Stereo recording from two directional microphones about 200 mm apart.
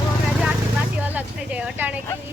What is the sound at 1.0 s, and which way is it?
Speech, 5° right (ahead or behind).